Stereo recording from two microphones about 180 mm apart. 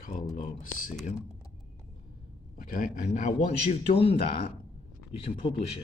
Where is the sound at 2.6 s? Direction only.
45° left (ahead or behind).